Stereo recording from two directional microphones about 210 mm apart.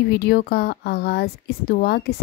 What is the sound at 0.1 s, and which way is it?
A woman's voice, 50° left (ahead or behind).